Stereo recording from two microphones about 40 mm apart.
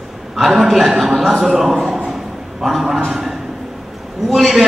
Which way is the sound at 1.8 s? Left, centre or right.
Right.